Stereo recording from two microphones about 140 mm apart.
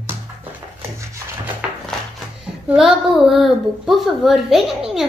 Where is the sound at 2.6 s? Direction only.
5° right (ahead or behind).